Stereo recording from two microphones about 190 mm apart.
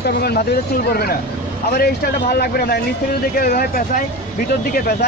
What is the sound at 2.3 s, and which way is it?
Speech, 55° left (ahead or behind).